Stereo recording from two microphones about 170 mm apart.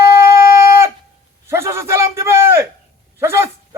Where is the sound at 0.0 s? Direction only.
15° right (ahead or behind).